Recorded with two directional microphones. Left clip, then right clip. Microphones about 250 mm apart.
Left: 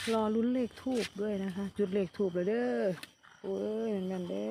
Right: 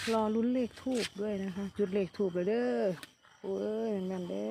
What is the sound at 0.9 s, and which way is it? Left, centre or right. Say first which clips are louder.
Speech: left 1 dB; centre.